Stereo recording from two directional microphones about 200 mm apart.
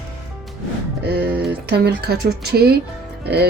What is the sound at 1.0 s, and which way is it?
Music, 55° right (ahead or behind).